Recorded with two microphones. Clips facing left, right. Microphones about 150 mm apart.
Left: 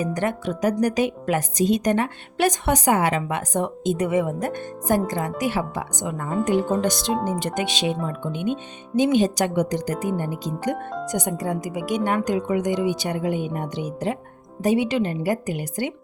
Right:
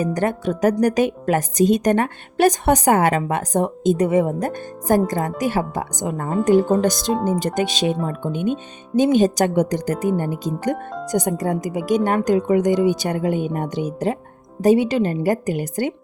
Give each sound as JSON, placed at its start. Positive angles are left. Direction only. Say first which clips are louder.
{"t": 0.0, "sound": "a woman's voice", "louder": "right 3 dB", "side_deg": -40}